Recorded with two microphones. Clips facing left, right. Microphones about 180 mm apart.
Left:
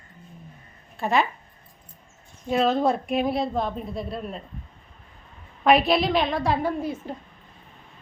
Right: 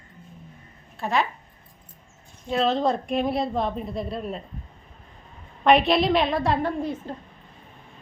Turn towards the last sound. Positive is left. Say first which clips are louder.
# even
turn(degrees=5)  # may be behind; listen again after turning